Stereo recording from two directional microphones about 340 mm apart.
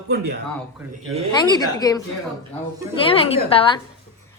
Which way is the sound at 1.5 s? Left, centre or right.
Centre.